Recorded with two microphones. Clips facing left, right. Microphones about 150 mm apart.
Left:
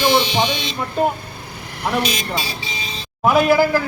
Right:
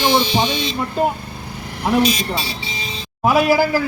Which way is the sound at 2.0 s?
35° right (ahead or behind).